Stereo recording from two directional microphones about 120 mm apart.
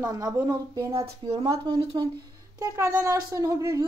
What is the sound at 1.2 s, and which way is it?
Speech, 50° right (ahead or behind).